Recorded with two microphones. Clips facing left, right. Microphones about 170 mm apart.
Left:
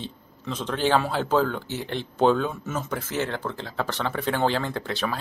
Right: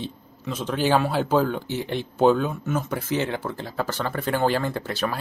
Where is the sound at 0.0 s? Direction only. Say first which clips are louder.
Right 3 dB; 10° right (ahead or behind).